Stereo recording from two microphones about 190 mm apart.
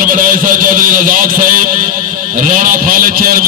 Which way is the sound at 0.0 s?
45° right (ahead or behind).